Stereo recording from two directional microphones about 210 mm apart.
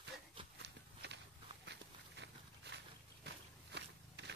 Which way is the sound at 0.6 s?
55° right (ahead or behind).